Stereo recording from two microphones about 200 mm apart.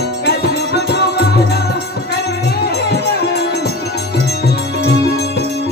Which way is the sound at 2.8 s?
55° left (ahead or behind).